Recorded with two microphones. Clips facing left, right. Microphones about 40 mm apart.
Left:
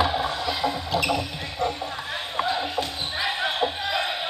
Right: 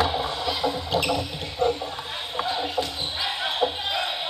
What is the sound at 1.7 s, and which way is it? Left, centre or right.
Music, left.